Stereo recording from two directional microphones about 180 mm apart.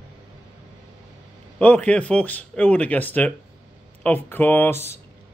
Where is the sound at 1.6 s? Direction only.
5° left (ahead or behind).